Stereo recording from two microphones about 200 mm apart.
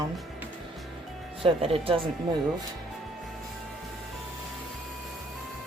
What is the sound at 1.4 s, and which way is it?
Speech, 30° right (ahead or behind).